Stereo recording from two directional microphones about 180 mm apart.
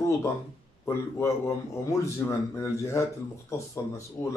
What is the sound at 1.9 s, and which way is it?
Speech, 15° left (ahead or behind).